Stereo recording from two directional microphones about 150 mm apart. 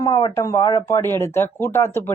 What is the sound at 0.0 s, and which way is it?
Speech, 25° left (ahead or behind).